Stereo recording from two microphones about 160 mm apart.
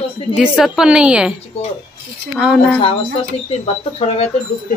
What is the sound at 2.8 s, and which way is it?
Speech, 35° left (ahead or behind).